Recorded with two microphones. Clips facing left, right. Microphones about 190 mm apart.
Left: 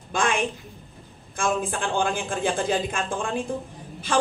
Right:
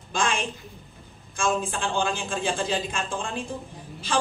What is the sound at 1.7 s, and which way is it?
A woman's voice, 55° left (ahead or behind).